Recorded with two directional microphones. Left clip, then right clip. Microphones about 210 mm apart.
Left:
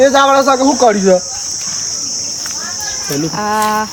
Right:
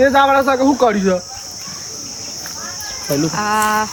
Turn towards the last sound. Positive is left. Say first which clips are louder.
# left 2 dB
turn(degrees=50)  # may be behind; listen again after turning